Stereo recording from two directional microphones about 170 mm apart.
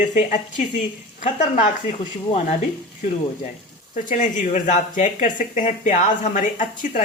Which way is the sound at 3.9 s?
50° left (ahead or behind).